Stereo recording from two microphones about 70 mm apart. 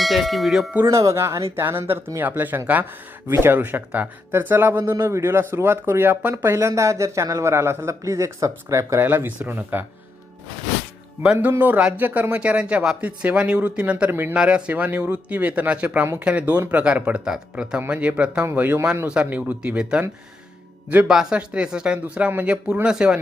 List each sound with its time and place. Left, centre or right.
0.0 s tubular bells: centre
0.9 s a man's voice: right
2.1 s speech: right
4.9 s a man's voice: right
9.0 s speech: right
11.6 s speech: right
14.1 s speech: right
14.3 s speech: centre
14.7 s speech: right
18.5 s speech: right
19.0 s speech: centre
21.1 s speech: centre; by 22.5 s right
22.6 s speech: centre